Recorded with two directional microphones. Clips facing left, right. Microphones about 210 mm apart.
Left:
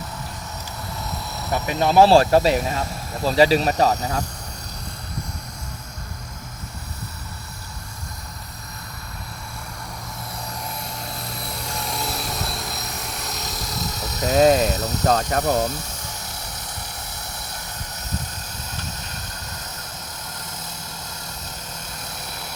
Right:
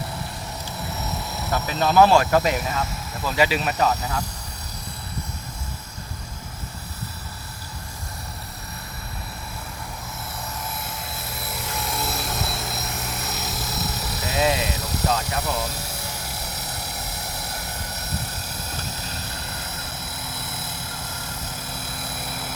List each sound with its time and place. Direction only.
1.5 s speech: 15° left (ahead or behind)
2.0 s speech: 30° left (ahead or behind)
10.8 s vehicle: 5° right (ahead or behind)
14.3 s vehicle: 45° left (ahead or behind)
14.7 s vehicle: 10° right (ahead or behind)
15.4 s speech: 40° left (ahead or behind)
15.7 s helicopter: 10° right (ahead or behind)
21.4 s vehicle: 5° right (ahead or behind)